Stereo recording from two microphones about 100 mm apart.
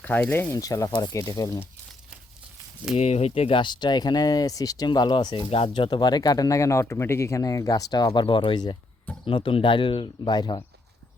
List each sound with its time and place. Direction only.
0.0 s speech: 15° left (ahead or behind)
0.5 s speech: 35° left (ahead or behind)
2.9 s speech: 90° left
3.6 s speech: 50° left (ahead or behind)
4.9 s speech: 50° left (ahead or behind)
9.2 s speech: 60° left (ahead or behind)